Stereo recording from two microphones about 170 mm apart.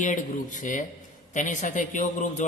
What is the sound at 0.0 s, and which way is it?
A man's voice, 45° left (ahead or behind).